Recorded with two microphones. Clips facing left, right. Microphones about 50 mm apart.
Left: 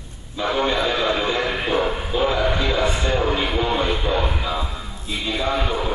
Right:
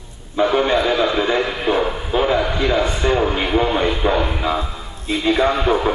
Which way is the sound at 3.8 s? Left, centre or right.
Right.